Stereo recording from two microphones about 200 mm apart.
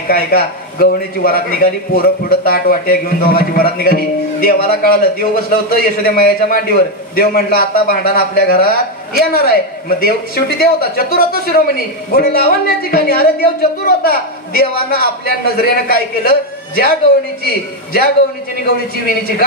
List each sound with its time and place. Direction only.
0.1 s a man's voice: 50° left (ahead or behind)